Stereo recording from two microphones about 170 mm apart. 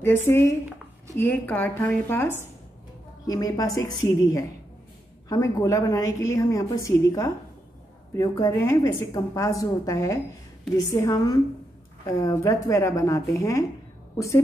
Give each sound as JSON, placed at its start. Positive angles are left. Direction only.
{"t": 0.0, "sound": "a woman's voice", "side_deg": 15}